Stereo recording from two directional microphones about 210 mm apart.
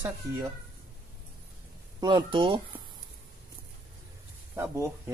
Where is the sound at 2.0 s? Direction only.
20° right (ahead or behind).